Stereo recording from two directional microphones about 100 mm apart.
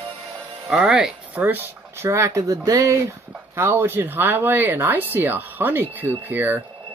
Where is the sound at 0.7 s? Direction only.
5° right (ahead or behind).